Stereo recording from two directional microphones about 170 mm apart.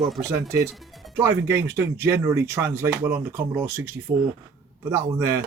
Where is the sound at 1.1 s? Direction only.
15° right (ahead or behind).